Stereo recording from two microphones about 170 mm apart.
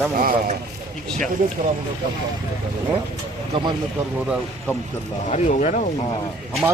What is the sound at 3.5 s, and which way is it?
Speech, 25° right (ahead or behind).